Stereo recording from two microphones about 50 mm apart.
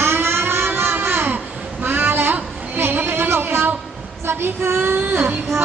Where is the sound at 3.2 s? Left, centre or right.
Right.